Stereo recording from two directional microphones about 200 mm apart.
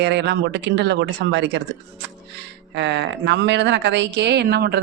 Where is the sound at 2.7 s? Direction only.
60° right (ahead or behind).